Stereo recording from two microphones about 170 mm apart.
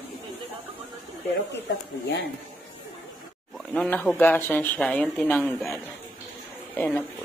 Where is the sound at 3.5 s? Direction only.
5° left (ahead or behind).